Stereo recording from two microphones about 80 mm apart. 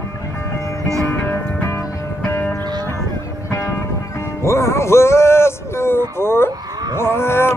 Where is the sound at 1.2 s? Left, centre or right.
Left.